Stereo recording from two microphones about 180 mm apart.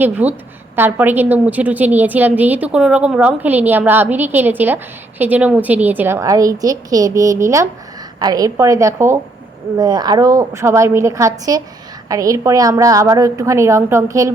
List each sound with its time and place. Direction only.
0.0 s a woman's voice: 10° right (ahead or behind)